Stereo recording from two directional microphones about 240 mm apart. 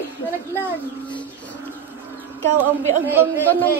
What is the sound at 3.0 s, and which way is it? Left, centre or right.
Female singing, centre.